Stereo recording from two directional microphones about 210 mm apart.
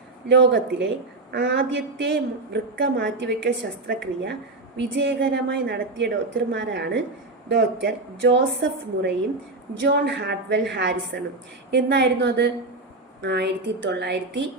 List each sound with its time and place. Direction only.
0.3 s a woman's voice: 60° right (ahead or behind)